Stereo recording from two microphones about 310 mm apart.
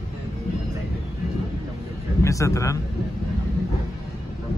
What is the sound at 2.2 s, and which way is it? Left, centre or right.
Speech, centre.